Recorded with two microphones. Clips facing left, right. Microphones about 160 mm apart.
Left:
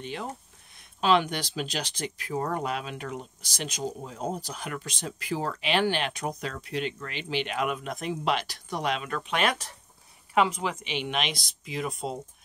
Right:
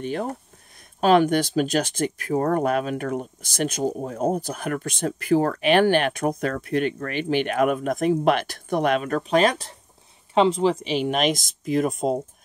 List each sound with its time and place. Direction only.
0.0 s speech: 50° right (ahead or behind)